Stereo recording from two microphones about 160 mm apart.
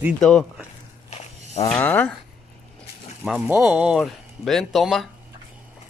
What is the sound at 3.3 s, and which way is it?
Speech, 5° right (ahead or behind).